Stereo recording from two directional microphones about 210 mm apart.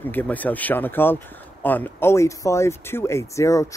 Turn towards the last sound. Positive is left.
turn(degrees=15)  # may be behind; listen again after turning